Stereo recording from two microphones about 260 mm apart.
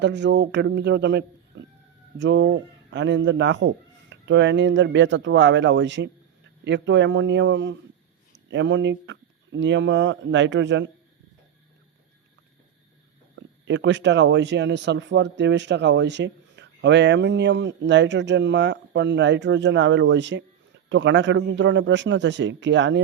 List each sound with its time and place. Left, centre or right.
0.0 s speech: right
13.3 s speech: right